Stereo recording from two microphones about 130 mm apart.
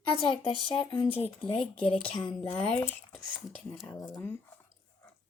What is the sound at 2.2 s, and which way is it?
A woman's voice, 10° left (ahead or behind).